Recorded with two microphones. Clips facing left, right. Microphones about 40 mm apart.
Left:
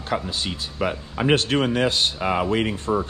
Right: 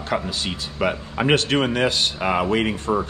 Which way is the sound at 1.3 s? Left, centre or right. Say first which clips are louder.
Even; right.